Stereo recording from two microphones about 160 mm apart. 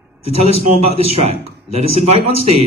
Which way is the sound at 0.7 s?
40° right (ahead or behind).